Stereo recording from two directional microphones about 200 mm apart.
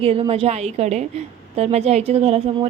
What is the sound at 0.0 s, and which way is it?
A woman's voice, 30° right (ahead or behind).